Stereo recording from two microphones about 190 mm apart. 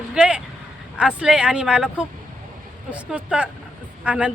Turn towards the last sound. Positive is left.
turn(degrees=-5)  # may be behind; listen again after turning